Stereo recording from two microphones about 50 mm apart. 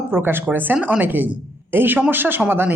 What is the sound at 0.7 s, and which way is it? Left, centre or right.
A woman's voice, right.